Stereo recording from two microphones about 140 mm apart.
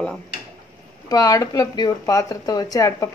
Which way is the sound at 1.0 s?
25° left (ahead or behind).